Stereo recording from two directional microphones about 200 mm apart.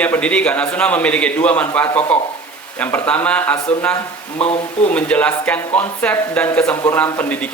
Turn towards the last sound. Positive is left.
turn(degrees=5)  # may be behind; listen again after turning